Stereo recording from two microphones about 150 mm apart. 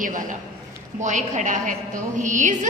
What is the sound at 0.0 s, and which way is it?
A woman's voice, 60° right (ahead or behind).